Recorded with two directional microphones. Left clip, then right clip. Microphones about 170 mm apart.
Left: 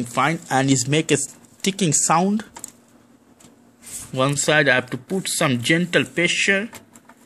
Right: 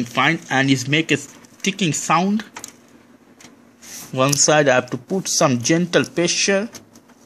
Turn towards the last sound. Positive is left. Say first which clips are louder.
# even
turn(degrees=-10)  # may be behind; listen again after turning